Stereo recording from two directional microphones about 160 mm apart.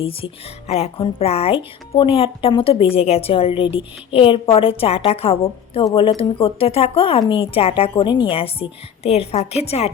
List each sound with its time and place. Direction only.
0.0 s speech: 35° left (ahead or behind)